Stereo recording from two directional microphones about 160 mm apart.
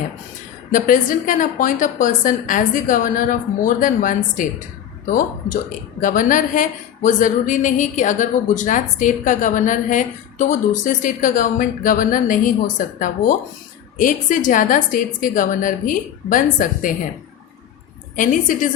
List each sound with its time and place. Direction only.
0.7 s a woman's voice: 55° left (ahead or behind)
18.2 s a woman's voice: 55° left (ahead or behind)